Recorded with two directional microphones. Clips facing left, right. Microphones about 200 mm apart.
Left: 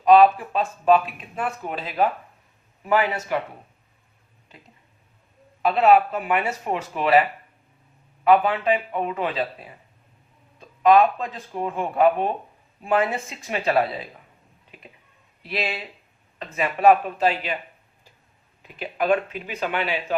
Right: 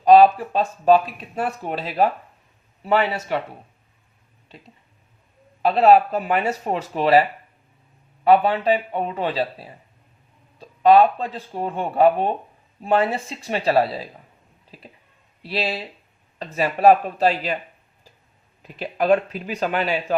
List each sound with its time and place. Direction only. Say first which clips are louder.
0.0 s speech: right 2 dB; 35° right (ahead or behind)
5.6 s speech: right 2 dB; 35° right (ahead or behind)
14.7 s a sound: right 3 dB; 35° right (ahead or behind)
15.4 s speech: right 3 dB; 35° right (ahead or behind)
18.6 s speech: right 3 dB; 40° right (ahead or behind)